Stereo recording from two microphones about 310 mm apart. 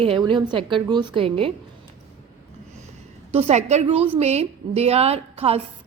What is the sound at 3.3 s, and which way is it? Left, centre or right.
A woman's voice, centre.